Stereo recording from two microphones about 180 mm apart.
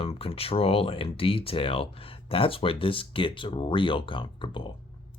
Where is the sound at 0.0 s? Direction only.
35° left (ahead or behind).